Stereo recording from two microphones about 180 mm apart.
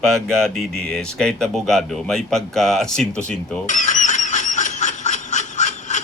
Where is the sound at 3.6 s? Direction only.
45° left (ahead or behind).